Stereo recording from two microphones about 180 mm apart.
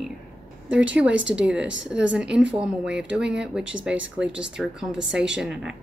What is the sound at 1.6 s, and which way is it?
Speech, 90° right.